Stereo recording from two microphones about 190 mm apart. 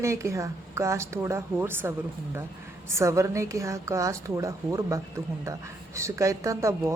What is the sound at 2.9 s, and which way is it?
A woman's voice, 15° right (ahead or behind).